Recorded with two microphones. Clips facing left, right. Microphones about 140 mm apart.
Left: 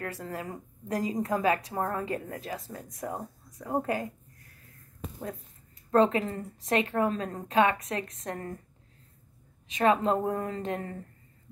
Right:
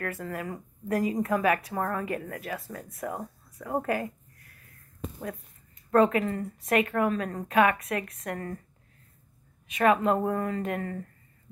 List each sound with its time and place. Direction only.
0.0 s a woman's voice: 25° left (ahead or behind)
5.9 s a woman's voice: 25° left (ahead or behind)
9.8 s a woman's voice: 25° left (ahead or behind)